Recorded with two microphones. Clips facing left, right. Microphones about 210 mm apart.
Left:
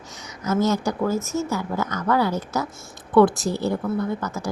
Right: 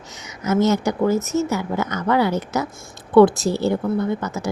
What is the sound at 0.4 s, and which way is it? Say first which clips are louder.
Speech: right 3 dB; 20° right (ahead or behind).